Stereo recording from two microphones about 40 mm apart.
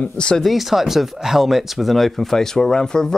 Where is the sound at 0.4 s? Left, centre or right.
Centre.